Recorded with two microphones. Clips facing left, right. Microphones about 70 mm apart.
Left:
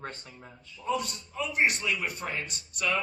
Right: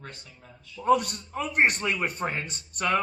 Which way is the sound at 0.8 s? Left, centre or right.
Right.